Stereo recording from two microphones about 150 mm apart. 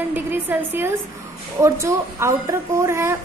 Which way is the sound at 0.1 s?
15° right (ahead or behind).